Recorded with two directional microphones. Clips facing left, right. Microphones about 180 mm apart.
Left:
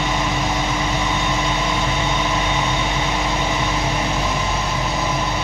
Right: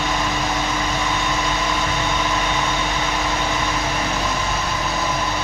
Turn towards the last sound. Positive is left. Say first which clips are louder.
# left 1 dB
turn(degrees=15)  # may be behind; listen again after turning